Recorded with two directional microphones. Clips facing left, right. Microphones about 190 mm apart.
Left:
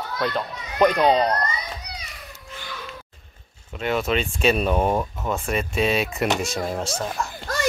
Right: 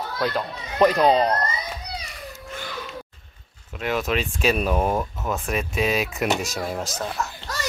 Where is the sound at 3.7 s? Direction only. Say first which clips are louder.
Left 1 dB; centre (ahead or behind).